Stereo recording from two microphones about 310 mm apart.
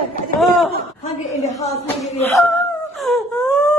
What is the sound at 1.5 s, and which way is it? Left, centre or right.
Speech, centre.